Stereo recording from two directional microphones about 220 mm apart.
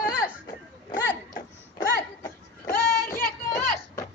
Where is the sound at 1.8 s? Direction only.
15° left (ahead or behind).